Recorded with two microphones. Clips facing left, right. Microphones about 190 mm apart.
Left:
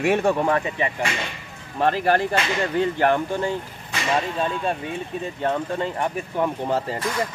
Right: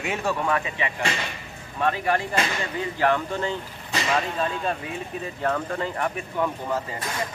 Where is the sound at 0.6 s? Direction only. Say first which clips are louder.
Left 4 dB; 40° left (ahead or behind).